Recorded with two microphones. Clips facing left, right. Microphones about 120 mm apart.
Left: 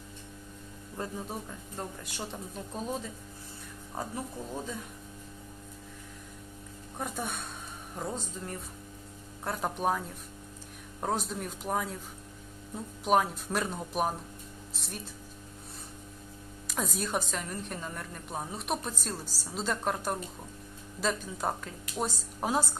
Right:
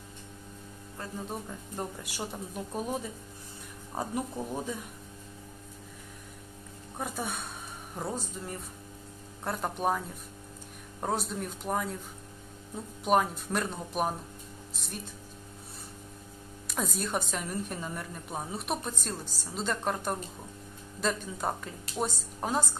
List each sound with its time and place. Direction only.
1.7 s speech: 10° right (ahead or behind)
7.0 s a woman's voice: centre (ahead or behind)
11.0 s a woman's voice: centre (ahead or behind)
16.6 s a woman's voice: centre (ahead or behind)